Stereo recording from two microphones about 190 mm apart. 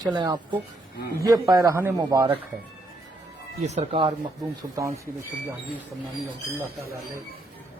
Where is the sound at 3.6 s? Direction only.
35° right (ahead or behind).